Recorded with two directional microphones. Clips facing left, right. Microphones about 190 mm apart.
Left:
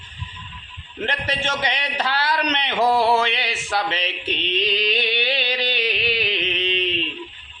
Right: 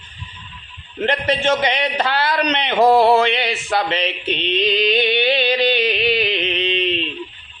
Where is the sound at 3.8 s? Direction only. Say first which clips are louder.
Right 5 dB; 5° left (ahead or behind).